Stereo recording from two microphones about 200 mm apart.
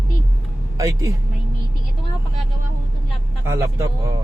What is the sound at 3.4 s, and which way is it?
Speech, 15° right (ahead or behind).